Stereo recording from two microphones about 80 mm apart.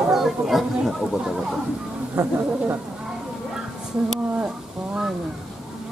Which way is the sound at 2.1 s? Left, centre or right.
Right.